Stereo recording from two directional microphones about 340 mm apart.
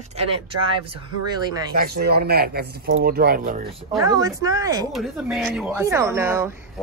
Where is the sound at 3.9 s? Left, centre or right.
Centre.